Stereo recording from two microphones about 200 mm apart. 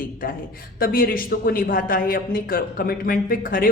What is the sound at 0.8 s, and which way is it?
Speech, 45° left (ahead or behind).